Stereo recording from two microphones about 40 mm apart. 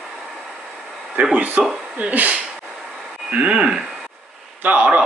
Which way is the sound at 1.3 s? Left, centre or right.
Right.